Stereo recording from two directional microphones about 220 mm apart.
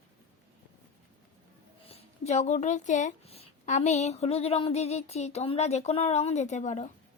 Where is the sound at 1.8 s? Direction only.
30° left (ahead or behind).